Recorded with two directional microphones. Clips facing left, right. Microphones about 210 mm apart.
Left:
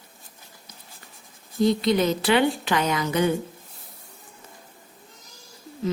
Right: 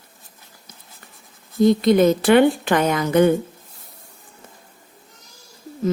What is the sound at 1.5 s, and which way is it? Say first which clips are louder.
Speech: right 6 dB; 50° right (ahead or behind).